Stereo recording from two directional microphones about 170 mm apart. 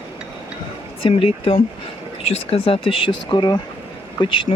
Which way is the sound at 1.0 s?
35° left (ahead or behind).